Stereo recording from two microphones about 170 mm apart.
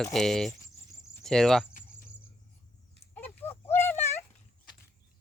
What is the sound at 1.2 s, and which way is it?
Cricket, 5° left (ahead or behind).